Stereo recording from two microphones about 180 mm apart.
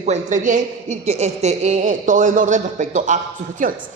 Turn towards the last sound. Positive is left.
turn(degrees=-45)  # may be behind; listen again after turning